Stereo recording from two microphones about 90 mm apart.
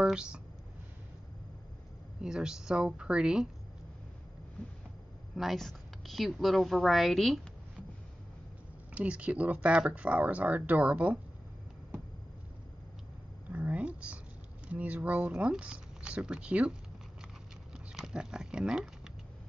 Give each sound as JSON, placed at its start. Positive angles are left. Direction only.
{"t": 0.0, "sound": "speech", "side_deg": -10}
{"t": 2.2, "sound": "speech", "side_deg": -5}
{"t": 5.3, "sound": "a woman's voice", "side_deg": 0}
{"t": 8.9, "sound": "speech", "side_deg": -15}
{"t": 13.5, "sound": "a sound", "side_deg": -15}
{"t": 14.7, "sound": "speech", "side_deg": -15}
{"t": 17.7, "sound": "a sound", "side_deg": -10}